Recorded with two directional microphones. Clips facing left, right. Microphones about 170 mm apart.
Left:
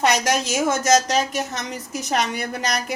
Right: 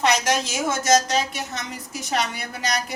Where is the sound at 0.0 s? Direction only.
40° left (ahead or behind).